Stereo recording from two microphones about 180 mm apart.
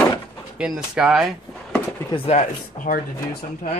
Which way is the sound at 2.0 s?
30° left (ahead or behind).